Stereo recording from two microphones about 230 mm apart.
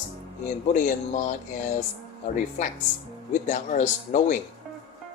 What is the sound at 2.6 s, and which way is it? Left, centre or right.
Speech, left.